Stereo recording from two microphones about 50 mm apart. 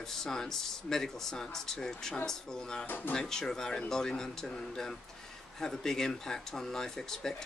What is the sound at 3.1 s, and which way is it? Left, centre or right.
Speech, centre.